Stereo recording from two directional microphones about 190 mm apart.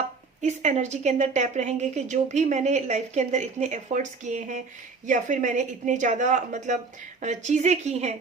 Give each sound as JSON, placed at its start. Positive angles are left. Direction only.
{"t": 0.4, "sound": "a woman's voice", "side_deg": -40}